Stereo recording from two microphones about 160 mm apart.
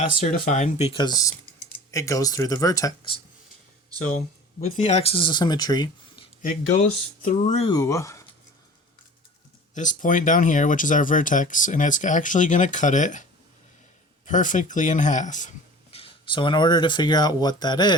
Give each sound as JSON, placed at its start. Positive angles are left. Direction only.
{"t": 0.0, "sound": "speech", "side_deg": 55}
{"t": 4.8, "sound": "speech", "side_deg": 45}
{"t": 7.2, "sound": "speech", "side_deg": 50}
{"t": 7.7, "sound": "speech", "side_deg": 20}
{"t": 9.7, "sound": "speech", "side_deg": 50}
{"t": 14.3, "sound": "speech", "side_deg": 50}